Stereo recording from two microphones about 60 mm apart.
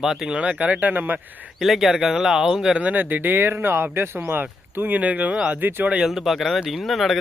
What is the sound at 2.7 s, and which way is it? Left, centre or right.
Speech, right.